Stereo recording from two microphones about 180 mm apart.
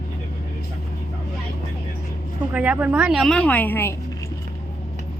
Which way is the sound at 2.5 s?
5° right (ahead or behind).